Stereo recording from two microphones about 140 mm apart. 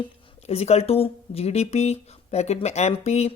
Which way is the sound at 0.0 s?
45° left (ahead or behind).